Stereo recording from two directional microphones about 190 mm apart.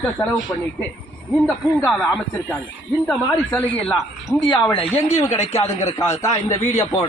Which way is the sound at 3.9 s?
20° left (ahead or behind).